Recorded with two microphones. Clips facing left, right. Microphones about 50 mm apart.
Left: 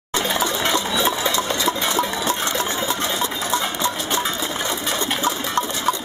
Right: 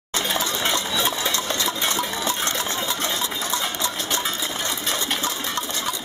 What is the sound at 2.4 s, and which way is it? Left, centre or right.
Sewing machine, centre.